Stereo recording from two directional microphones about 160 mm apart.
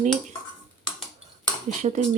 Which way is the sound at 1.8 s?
45° right (ahead or behind).